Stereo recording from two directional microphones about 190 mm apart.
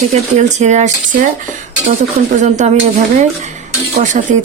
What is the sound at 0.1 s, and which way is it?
Speech, 40° right (ahead or behind).